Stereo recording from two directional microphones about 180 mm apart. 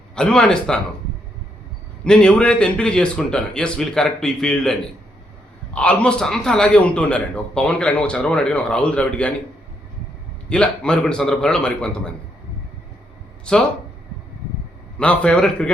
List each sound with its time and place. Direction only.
0.2 s a man's voice: 5° left (ahead or behind)
2.0 s a man's voice: 5° left (ahead or behind)
10.5 s a man's voice: 5° left (ahead or behind)
13.5 s a man's voice: 5° left (ahead or behind)
14.9 s a man's voice: 5° left (ahead or behind)